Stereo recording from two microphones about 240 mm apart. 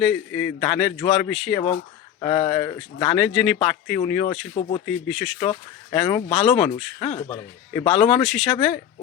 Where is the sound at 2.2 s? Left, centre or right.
Centre.